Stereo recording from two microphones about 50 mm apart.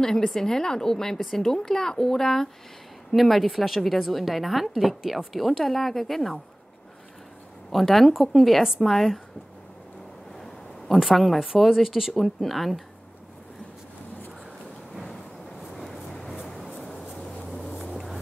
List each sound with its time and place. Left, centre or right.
0.0 s a woman's voice: centre
7.7 s a woman's voice: centre
11.0 s a woman's voice: centre
15.7 s vehicle: centre
16.4 s writing: centre
17.5 s vehicle: centre